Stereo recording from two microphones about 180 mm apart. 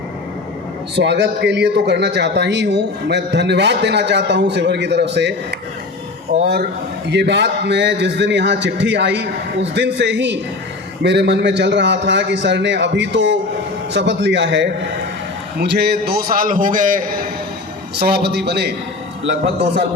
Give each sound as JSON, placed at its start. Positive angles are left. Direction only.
{"t": 0.9, "sound": "a man's voice", "side_deg": -70}
{"t": 6.4, "sound": "a man's voice", "side_deg": -60}
{"t": 7.1, "sound": "a man's voice", "side_deg": -75}
{"t": 17.9, "sound": "a man's voice", "side_deg": -60}